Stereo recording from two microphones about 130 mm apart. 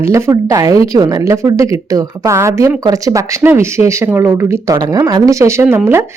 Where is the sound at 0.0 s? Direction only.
20° right (ahead or behind).